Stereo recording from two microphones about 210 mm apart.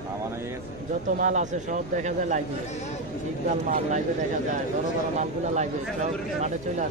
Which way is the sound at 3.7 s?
35° right (ahead or behind).